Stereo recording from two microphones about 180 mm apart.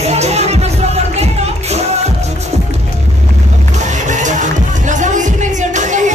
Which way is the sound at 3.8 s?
40° right (ahead or behind).